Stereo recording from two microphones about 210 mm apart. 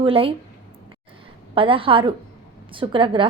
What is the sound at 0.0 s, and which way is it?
Speech, 25° right (ahead or behind).